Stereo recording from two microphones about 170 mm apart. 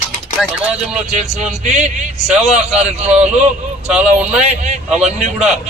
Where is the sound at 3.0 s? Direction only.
40° right (ahead or behind).